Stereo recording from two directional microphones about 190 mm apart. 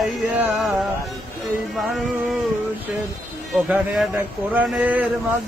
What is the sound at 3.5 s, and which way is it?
Music, 5° right (ahead or behind).